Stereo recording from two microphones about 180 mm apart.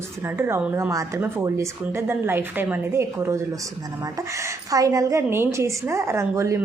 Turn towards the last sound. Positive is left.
turn(degrees=-15)  # may be behind; listen again after turning